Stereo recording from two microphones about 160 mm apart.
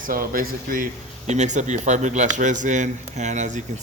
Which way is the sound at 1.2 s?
45° right (ahead or behind).